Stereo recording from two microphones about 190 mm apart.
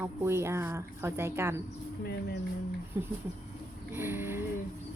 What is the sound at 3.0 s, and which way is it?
Speech, 10° right (ahead or behind).